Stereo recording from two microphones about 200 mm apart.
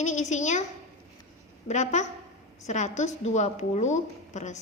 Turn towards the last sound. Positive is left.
turn(degrees=35)  # may be behind; listen again after turning